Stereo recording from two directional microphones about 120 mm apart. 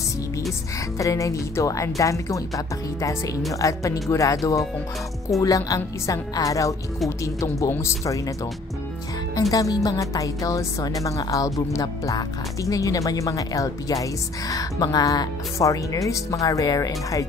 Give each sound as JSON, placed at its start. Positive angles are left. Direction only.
{"t": 0.9, "sound": "speech", "side_deg": 25}
{"t": 9.3, "sound": "speech", "side_deg": 30}